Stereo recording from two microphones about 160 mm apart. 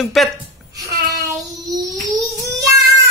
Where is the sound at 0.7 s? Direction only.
20° right (ahead or behind).